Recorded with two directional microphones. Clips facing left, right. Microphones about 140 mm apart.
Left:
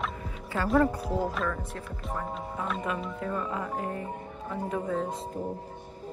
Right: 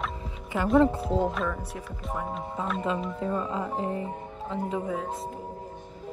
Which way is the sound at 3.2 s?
25° right (ahead or behind).